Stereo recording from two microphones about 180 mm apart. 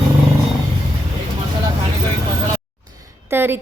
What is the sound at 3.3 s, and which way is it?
Speech, 10° right (ahead or behind).